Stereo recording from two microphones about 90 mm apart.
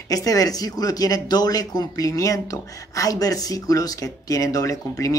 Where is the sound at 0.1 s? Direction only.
40° left (ahead or behind).